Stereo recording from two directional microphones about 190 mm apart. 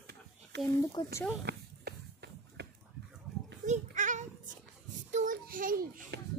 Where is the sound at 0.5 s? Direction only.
65° right (ahead or behind).